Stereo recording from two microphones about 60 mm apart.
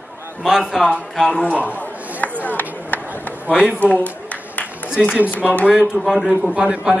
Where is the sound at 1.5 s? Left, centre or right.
Right.